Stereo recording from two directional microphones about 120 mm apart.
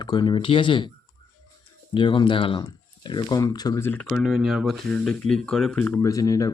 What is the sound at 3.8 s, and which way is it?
Speech, 15° left (ahead or behind).